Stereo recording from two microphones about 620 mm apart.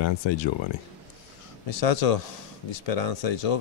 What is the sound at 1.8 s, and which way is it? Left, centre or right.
Speech, left.